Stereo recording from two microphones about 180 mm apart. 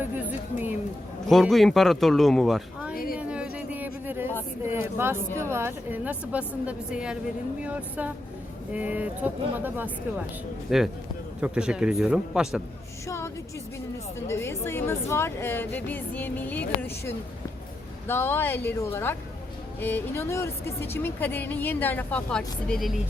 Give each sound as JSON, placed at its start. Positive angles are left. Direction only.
{"t": 1.3, "sound": "a man's voice", "side_deg": 0}
{"t": 2.9, "sound": "a sound", "side_deg": 55}
{"t": 3.2, "sound": "a sound", "side_deg": -5}
{"t": 4.6, "sound": "a woman's voice", "side_deg": -15}
{"t": 13.1, "sound": "music", "side_deg": 15}
{"t": 14.3, "sound": "a woman's voice", "side_deg": 15}